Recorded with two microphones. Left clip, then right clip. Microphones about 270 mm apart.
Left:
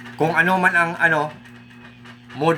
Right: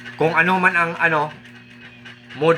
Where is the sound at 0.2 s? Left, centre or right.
Centre.